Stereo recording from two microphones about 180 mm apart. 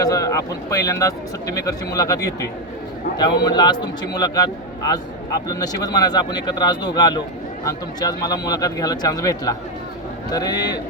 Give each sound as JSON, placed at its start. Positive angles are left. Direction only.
{"t": 0.0, "sound": "speech", "side_deg": 20}